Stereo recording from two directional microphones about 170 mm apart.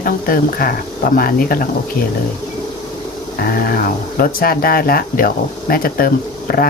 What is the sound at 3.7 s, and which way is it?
Speech, 55° left (ahead or behind).